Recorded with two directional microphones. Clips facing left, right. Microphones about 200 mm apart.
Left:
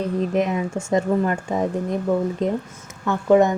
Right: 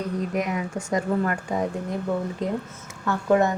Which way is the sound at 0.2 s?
25° left (ahead or behind).